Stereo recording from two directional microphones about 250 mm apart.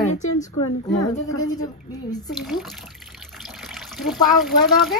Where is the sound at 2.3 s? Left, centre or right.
Centre.